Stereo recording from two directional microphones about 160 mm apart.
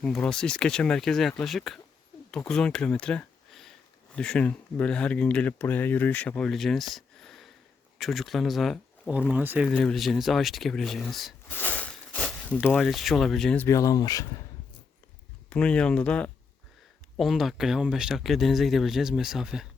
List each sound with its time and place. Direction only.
0.0 s speech: 5° left (ahead or behind)
9.3 s speech: 10° right (ahead or behind)
9.6 s speech: centre (ahead or behind)
11.4 s a sound: 10° left (ahead or behind)
12.6 s speech: 5° left (ahead or behind)
13.7 s speech: 20° left (ahead or behind)
15.4 s speech: 5° left (ahead or behind)